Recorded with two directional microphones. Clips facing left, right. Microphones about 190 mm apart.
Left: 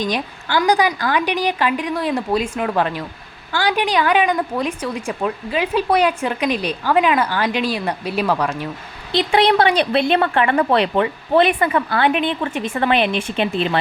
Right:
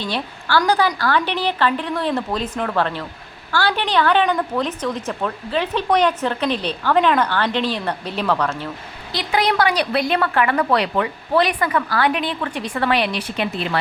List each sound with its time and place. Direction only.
0.0 s a woman's voice: 15° left (ahead or behind)
9.1 s a woman's voice: 30° left (ahead or behind)